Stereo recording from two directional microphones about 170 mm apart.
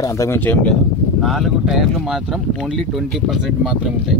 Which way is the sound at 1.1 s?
Centre (ahead or behind).